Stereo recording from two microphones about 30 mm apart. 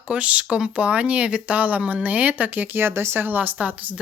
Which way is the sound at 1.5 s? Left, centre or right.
Right.